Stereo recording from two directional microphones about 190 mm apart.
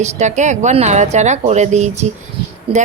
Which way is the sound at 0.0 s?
40° right (ahead or behind).